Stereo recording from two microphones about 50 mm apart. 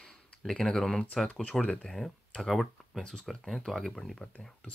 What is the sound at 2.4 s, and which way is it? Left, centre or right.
Speech, centre.